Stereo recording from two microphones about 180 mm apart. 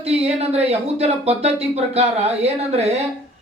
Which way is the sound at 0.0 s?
35° right (ahead or behind).